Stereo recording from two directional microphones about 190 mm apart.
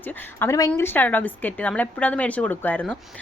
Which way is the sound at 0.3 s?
15° left (ahead or behind).